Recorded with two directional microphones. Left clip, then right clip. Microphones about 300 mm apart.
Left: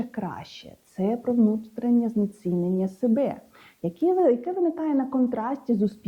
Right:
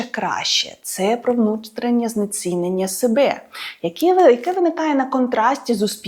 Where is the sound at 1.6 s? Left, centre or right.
Centre.